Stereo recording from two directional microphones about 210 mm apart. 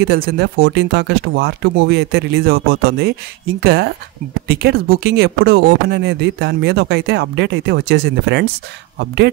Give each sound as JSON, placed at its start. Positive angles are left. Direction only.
{"t": 0.0, "sound": "speech", "side_deg": -50}